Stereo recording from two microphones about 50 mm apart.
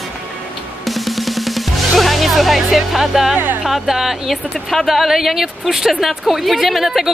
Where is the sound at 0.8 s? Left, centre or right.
Centre.